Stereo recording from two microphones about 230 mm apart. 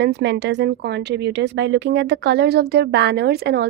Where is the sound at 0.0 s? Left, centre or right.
Right.